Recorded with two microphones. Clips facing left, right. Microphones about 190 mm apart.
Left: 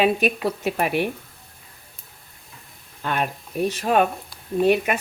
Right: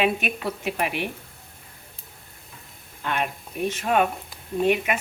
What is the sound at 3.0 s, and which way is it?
Speech, 40° left (ahead or behind).